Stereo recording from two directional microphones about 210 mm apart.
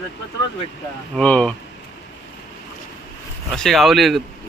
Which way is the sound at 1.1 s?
5° left (ahead or behind).